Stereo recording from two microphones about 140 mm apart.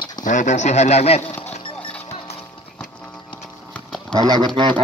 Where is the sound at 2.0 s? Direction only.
50° left (ahead or behind).